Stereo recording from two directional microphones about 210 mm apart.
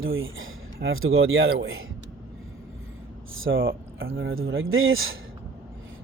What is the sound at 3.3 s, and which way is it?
Speech, 70° right (ahead or behind).